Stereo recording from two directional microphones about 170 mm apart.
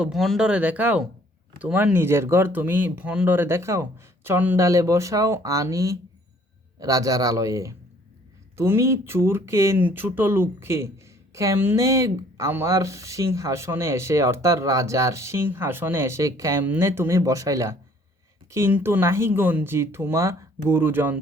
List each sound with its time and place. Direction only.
0.0 s a man's voice: centre (ahead or behind)